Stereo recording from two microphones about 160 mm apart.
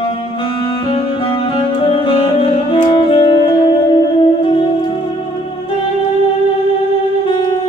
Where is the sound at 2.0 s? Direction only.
35° left (ahead or behind).